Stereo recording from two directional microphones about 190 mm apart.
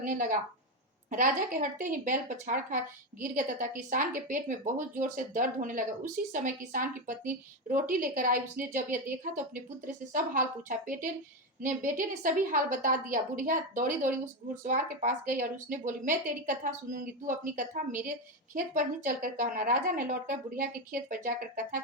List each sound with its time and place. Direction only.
0.0 s a woman's voice: 45° right (ahead or behind)